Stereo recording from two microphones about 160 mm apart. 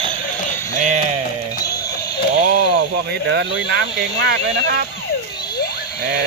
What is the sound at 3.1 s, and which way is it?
Speech, 90° right.